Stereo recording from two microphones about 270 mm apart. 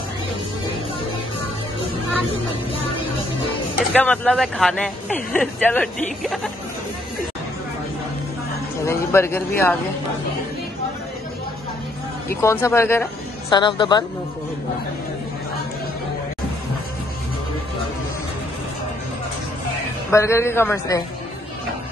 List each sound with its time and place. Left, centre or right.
3.9 s speech: centre
8.8 s speech: centre
12.3 s a man's voice: centre
20.1 s a man's voice: centre